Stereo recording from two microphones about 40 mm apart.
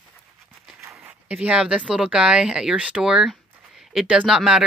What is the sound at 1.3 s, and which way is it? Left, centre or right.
Speech, right.